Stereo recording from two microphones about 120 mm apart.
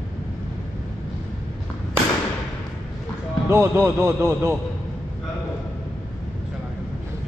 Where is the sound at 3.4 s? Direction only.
20° right (ahead or behind).